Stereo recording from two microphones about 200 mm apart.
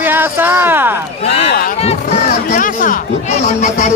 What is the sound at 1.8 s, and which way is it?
Speech, 30° left (ahead or behind).